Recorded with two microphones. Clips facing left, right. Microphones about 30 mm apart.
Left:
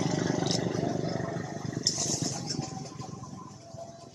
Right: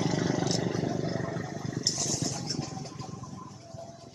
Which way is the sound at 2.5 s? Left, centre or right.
Right.